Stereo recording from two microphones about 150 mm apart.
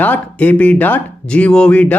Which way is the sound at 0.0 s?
10° left (ahead or behind).